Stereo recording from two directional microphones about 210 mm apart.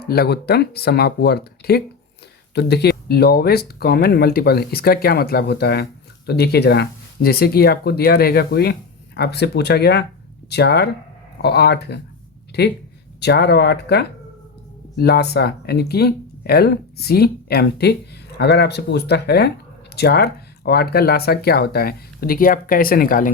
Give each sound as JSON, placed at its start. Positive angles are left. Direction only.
{"t": 0.0, "sound": "speech", "side_deg": 50}